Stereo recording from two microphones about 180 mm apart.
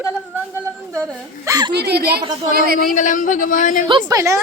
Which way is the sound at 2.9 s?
45° left (ahead or behind).